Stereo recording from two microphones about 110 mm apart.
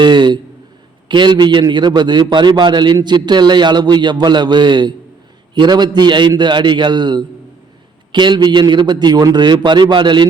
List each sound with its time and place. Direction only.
0.0 s a man's voice: 45° right (ahead or behind)